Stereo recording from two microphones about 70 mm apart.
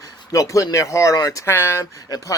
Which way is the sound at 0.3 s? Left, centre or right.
Left.